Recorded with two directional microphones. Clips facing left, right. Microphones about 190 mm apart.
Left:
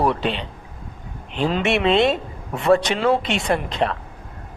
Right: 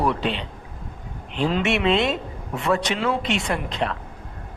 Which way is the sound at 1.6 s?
35° left (ahead or behind).